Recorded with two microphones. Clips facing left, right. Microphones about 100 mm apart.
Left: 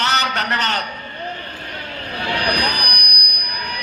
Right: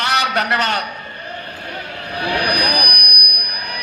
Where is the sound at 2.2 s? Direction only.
15° right (ahead or behind).